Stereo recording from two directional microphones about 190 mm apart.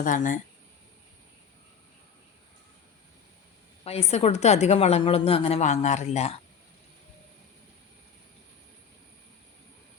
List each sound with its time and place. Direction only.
0.0 s speech: 45° left (ahead or behind)
3.8 s a woman's voice: 35° left (ahead or behind)